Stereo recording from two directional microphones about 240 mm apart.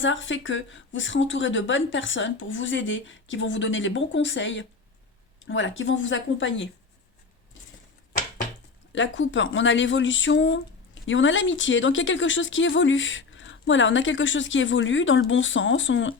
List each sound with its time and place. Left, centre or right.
0.0 s speech: left
8.9 s speech: left